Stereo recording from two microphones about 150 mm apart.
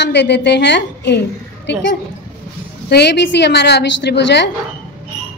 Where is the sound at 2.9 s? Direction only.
90° left.